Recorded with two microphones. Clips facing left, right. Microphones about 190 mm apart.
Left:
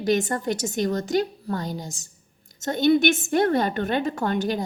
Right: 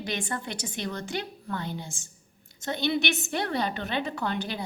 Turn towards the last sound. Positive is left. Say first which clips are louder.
# left 7 dB
turn(degrees=45)  # may be behind; listen again after turning